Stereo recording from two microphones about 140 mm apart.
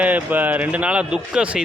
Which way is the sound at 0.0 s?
10° right (ahead or behind).